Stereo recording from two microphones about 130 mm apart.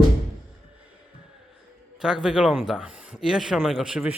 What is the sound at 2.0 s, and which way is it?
Speech, 5° right (ahead or behind).